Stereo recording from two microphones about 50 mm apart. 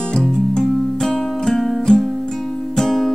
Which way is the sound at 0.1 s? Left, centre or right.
Centre.